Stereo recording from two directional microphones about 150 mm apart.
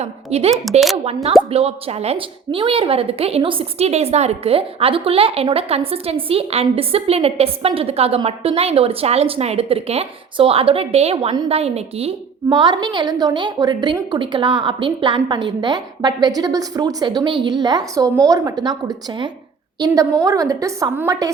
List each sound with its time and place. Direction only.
0.0 s a woman's voice: 45° right (ahead or behind); by 21.2 s 25° right (ahead or behind)